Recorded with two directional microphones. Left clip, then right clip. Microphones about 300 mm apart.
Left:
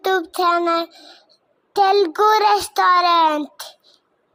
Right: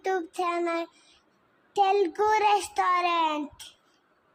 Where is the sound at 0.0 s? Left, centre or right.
Centre.